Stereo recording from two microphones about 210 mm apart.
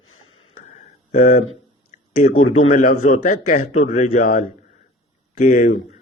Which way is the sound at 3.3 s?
40° left (ahead or behind).